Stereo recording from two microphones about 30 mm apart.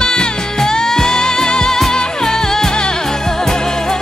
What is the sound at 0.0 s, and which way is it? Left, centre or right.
Music, left.